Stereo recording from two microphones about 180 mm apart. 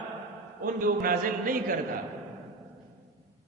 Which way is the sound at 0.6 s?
50° right (ahead or behind).